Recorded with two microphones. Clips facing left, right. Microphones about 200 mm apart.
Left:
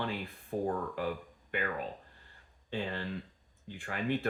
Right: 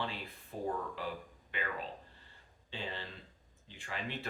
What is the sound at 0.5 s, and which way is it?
Speech, 45° left (ahead or behind).